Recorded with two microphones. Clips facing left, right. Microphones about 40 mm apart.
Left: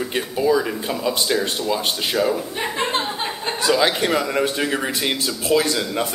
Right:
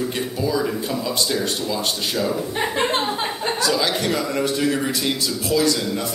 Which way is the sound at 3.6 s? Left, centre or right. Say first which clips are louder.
Left 4 dB; left.